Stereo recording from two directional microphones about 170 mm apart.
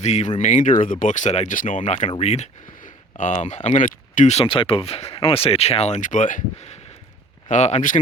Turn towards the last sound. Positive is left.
turn(degrees=45)  # may be behind; listen again after turning